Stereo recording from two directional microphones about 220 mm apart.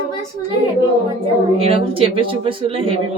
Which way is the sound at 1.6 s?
25° right (ahead or behind).